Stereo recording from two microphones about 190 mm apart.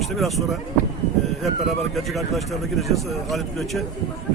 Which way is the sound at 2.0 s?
Centre (ahead or behind).